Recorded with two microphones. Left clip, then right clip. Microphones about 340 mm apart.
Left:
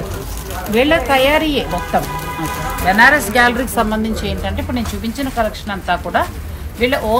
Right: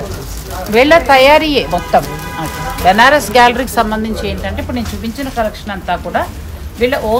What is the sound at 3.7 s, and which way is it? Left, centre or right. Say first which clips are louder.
Speech: right 3 dB; centre.